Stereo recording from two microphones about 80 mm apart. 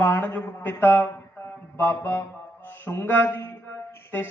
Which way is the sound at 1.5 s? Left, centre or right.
Left.